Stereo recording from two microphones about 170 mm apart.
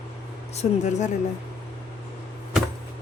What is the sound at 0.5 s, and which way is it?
Speech, 40° left (ahead or behind).